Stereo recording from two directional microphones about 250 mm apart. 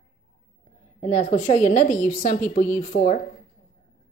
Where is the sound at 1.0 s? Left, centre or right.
Left.